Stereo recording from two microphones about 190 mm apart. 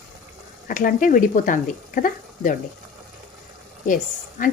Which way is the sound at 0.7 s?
45° left (ahead or behind).